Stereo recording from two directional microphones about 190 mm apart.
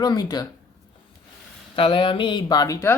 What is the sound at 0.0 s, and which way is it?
Speech, 20° left (ahead or behind).